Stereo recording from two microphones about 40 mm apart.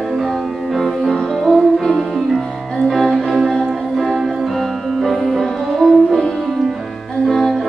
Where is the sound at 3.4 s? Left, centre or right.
Centre.